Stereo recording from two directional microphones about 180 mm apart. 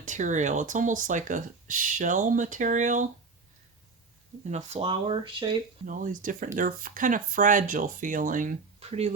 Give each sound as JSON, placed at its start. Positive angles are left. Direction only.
{"t": 0.0, "sound": "speech", "side_deg": -45}
{"t": 4.4, "sound": "speech", "side_deg": -40}
{"t": 5.8, "sound": "speech", "side_deg": -45}